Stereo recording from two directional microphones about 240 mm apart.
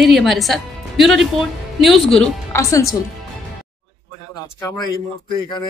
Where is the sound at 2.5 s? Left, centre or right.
Centre.